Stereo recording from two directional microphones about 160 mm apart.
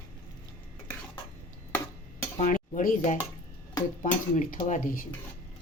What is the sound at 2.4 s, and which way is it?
Dishes, 55° left (ahead or behind).